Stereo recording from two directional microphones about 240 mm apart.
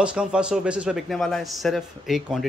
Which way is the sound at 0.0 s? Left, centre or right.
Centre.